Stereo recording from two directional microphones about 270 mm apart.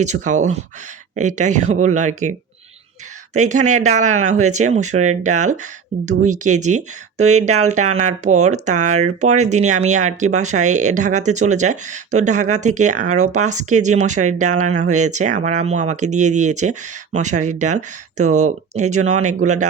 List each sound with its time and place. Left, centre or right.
0.0 s speech: right
3.3 s speech: right